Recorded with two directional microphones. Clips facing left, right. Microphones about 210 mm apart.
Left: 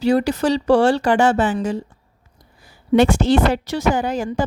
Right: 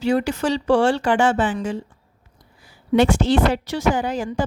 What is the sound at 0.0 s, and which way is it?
A woman's voice, 35° left (ahead or behind).